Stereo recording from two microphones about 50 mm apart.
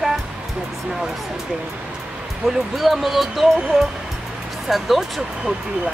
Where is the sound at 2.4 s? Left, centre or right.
Centre.